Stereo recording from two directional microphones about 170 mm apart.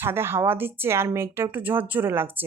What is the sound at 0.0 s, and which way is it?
Speech, 15° right (ahead or behind).